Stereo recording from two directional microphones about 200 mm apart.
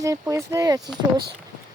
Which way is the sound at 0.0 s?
15° right (ahead or behind).